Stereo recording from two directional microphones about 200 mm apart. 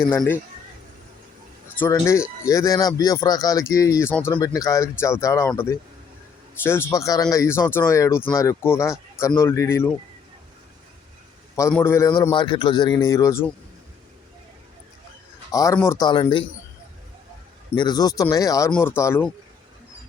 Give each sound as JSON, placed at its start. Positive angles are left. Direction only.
{"t": 0.1, "sound": "speech", "side_deg": 10}
{"t": 1.8, "sound": "speech", "side_deg": 15}
{"t": 11.7, "sound": "speech", "side_deg": 10}
{"t": 15.5, "sound": "speech", "side_deg": 15}
{"t": 17.7, "sound": "speech", "side_deg": 20}